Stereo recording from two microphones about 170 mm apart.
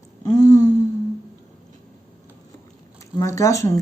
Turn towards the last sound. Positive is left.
turn(degrees=20)  # may be behind; listen again after turning